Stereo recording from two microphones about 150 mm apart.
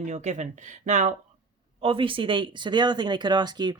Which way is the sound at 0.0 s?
50° right (ahead or behind).